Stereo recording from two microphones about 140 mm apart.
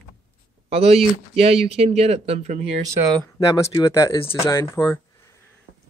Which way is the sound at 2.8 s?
20° right (ahead or behind).